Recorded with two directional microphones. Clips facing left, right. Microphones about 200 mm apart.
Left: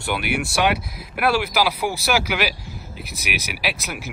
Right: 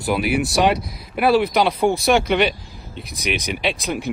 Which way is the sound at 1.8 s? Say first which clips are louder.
Right 7 dB; 30° right (ahead or behind).